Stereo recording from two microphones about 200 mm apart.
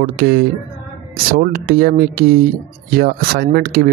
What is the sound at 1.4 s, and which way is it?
Speech, 50° right (ahead or behind).